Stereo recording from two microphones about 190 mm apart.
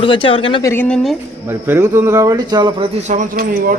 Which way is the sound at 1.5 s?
10° right (ahead or behind).